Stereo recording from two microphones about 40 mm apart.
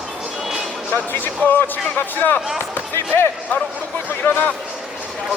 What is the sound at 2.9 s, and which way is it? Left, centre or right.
Speech, left.